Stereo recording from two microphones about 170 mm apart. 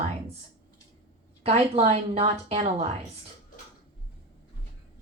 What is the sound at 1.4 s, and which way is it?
A woman's voice, 40° right (ahead or behind).